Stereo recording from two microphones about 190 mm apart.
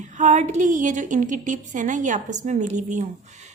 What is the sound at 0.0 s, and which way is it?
A woman's voice, 40° right (ahead or behind).